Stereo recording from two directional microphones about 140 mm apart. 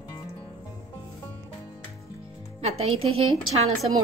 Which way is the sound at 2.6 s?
45° right (ahead or behind).